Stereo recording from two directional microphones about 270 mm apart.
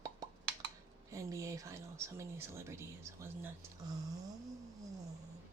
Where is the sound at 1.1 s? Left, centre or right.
Centre.